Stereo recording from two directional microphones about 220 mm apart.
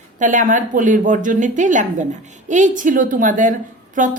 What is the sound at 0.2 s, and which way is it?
A woman's voice, 35° right (ahead or behind).